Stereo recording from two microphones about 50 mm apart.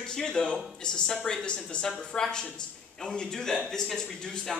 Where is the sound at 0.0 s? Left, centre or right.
Centre.